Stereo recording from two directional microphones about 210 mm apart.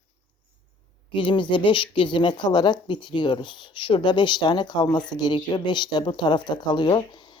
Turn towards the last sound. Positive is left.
turn(degrees=20)  # may be behind; listen again after turning